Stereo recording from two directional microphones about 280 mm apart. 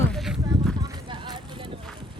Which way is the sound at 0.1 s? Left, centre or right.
Centre.